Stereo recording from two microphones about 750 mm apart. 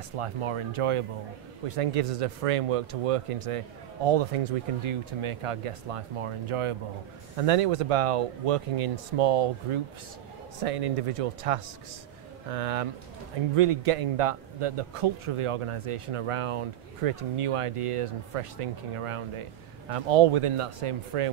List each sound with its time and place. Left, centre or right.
0.2 s a man's voice: right